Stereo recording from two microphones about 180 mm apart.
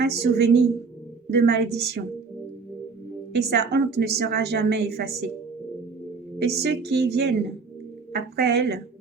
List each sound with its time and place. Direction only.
0.0 s a woman's voice: 65° right (ahead or behind)
3.3 s a woman's voice: 65° right (ahead or behind)
6.4 s a woman's voice: 65° right (ahead or behind)